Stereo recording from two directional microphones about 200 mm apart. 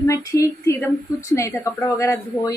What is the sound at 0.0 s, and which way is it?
A woman's voice, 15° left (ahead or behind).